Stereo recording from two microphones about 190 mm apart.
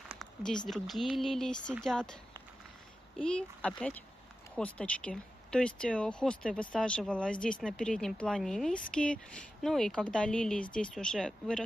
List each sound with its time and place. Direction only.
0.1 s a sound: centre (ahead or behind)
0.7 s speech: centre (ahead or behind)
3.2 s speech: 5° left (ahead or behind)